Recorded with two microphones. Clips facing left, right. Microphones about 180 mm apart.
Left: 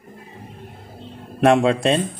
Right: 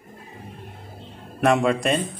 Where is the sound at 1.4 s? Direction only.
25° left (ahead or behind).